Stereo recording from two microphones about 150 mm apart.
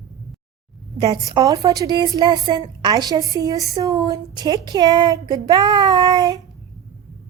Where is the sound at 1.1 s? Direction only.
25° right (ahead or behind).